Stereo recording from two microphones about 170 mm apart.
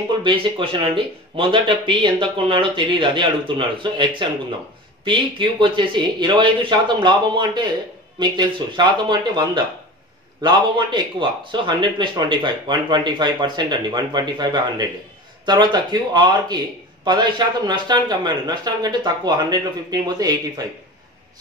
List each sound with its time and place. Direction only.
0.2 s speech: 30° right (ahead or behind)